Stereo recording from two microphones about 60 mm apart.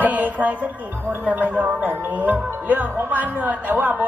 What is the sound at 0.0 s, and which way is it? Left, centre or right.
Speech, right.